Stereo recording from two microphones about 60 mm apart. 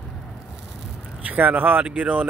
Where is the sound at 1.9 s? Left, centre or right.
Centre.